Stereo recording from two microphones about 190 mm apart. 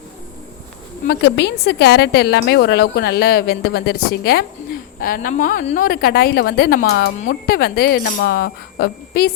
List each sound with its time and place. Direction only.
1.0 s a woman's voice: 60° left (ahead or behind)